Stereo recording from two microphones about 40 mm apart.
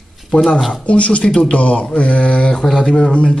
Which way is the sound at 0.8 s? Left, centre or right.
Left.